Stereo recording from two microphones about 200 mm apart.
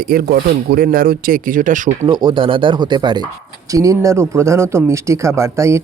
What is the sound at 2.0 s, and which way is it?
A man's voice, 25° right (ahead or behind).